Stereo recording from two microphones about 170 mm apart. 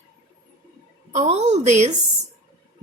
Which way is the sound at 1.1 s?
40° right (ahead or behind).